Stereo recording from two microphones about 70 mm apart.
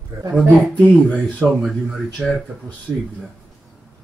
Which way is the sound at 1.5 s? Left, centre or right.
Centre.